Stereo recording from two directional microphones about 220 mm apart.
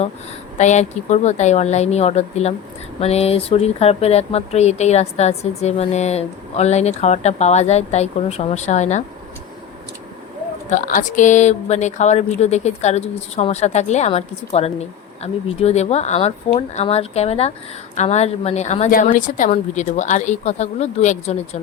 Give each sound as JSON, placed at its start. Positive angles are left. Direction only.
{"t": 0.5, "sound": "speech", "side_deg": 30}
{"t": 10.7, "sound": "speech", "side_deg": 35}